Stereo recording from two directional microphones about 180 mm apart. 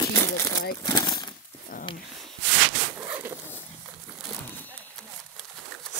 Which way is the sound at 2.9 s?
10° right (ahead or behind).